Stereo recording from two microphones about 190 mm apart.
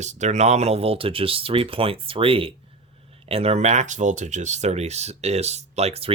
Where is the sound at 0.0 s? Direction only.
35° right (ahead or behind).